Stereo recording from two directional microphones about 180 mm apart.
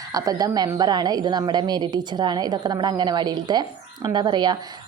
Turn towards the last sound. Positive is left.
turn(degrees=-25)  # may be behind; listen again after turning